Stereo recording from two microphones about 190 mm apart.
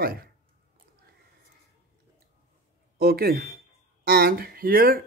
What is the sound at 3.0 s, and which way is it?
Speech, 55° right (ahead or behind).